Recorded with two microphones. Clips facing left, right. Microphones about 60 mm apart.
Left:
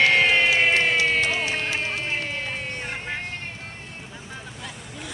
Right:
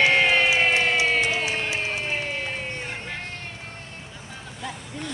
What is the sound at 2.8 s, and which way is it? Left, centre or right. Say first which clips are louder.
Music: left 2 dB; centre.